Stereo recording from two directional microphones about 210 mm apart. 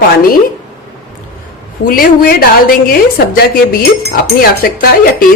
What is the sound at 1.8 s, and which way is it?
Speech, 45° left (ahead or behind).